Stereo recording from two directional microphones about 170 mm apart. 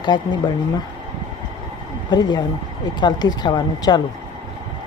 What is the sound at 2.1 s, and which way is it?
Speech, 25° left (ahead or behind).